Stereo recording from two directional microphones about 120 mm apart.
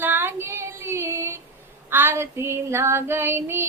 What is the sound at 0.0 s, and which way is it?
Child singing, 20° right (ahead or behind).